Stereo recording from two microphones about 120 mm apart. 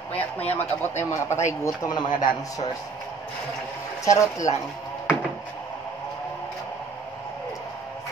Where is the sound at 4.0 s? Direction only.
25° left (ahead or behind).